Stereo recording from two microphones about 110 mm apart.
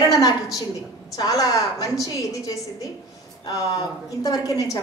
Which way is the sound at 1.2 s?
35° left (ahead or behind).